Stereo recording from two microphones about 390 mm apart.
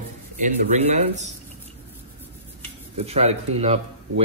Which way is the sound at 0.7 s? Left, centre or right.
Centre.